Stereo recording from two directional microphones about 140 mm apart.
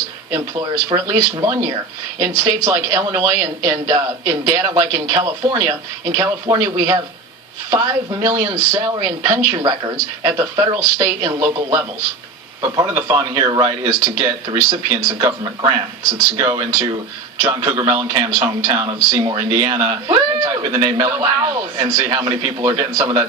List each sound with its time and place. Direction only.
0.9 s speech: 30° right (ahead or behind)